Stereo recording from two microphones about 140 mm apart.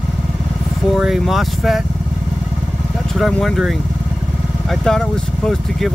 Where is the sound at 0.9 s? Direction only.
5° right (ahead or behind).